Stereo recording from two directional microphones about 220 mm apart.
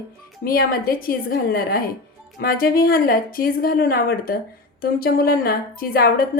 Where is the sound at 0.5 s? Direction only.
40° left (ahead or behind).